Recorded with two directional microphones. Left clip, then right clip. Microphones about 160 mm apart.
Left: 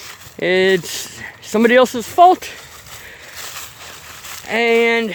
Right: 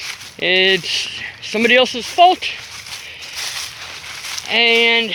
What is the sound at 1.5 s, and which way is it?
Speech, 45° left (ahead or behind).